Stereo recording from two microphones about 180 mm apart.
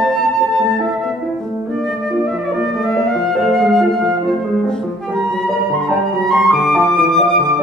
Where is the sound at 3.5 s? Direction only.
Centre (ahead or behind).